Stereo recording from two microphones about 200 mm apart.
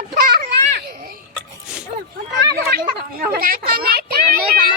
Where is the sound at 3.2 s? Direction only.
45° right (ahead or behind).